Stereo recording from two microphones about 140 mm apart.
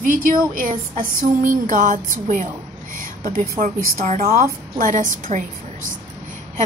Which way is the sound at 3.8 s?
70° right (ahead or behind).